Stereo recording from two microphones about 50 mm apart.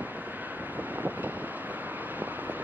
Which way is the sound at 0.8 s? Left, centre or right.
Right.